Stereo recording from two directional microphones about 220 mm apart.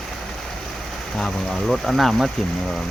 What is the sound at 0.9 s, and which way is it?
Speech, centre (ahead or behind).